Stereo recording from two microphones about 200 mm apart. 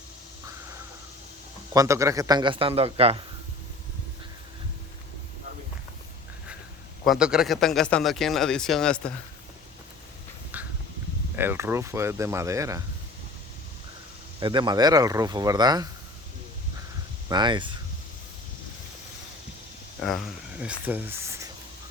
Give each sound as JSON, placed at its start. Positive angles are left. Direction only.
{"t": 1.7, "sound": "a man's voice", "side_deg": -15}
{"t": 7.0, "sound": "speech", "side_deg": 0}
{"t": 10.5, "sound": "a sound", "side_deg": -10}
{"t": 11.3, "sound": "speech", "side_deg": -10}
{"t": 14.3, "sound": "a man's voice", "side_deg": -25}
{"t": 17.2, "sound": "speech", "side_deg": -20}
{"t": 20.0, "sound": "speech", "side_deg": 0}